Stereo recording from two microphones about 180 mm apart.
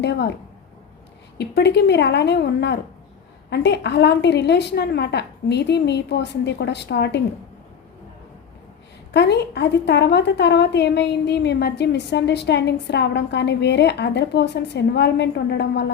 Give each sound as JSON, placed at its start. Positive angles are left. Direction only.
{"t": 0.0, "sound": "a woman's voice", "side_deg": 70}
{"t": 1.4, "sound": "a woman's voice", "side_deg": 70}
{"t": 9.1, "sound": "a woman's voice", "side_deg": 70}